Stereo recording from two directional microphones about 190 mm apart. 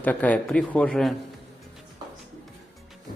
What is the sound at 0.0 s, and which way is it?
A man's voice, 10° left (ahead or behind).